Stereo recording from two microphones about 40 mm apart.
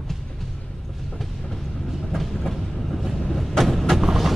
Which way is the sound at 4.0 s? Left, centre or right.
Centre.